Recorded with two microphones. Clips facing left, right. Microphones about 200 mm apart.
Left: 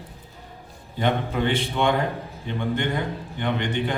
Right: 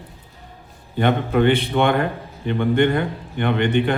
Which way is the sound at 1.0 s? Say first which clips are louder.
Right 6 dB; 60° right (ahead or behind).